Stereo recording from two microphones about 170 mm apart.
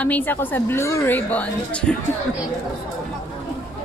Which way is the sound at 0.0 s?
10° left (ahead or behind).